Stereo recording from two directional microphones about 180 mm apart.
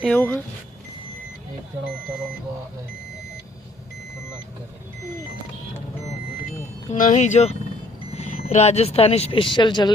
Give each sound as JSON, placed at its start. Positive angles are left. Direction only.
{"t": 0.0, "sound": "speech", "side_deg": 10}
{"t": 6.9, "sound": "speech", "side_deg": 45}